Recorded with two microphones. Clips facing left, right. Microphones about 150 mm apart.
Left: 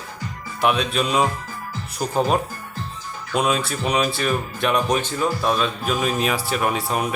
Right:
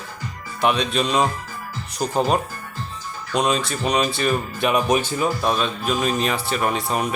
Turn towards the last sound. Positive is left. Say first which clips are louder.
# even
turn(degrees=5)  # may be behind; listen again after turning